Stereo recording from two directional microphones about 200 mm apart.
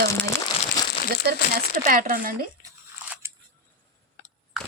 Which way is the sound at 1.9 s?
45° right (ahead or behind).